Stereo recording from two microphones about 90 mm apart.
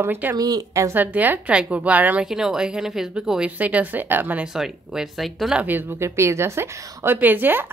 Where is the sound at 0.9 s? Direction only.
20° right (ahead or behind).